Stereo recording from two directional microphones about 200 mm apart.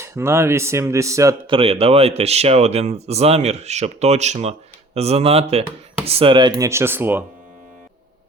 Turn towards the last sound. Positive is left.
turn(degrees=-10)  # may be behind; listen again after turning